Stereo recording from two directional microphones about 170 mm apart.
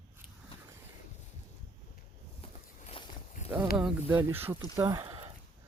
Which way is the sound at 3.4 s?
10° right (ahead or behind).